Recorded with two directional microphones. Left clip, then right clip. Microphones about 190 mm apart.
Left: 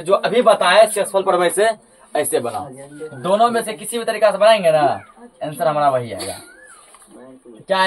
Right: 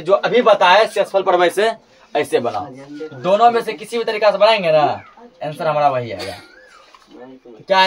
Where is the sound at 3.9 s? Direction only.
20° right (ahead or behind).